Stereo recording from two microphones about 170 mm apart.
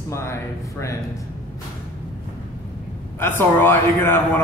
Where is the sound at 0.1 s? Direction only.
15° left (ahead or behind).